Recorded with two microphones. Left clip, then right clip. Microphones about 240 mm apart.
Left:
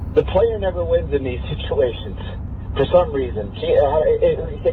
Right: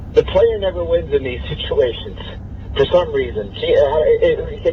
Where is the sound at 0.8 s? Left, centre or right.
Right.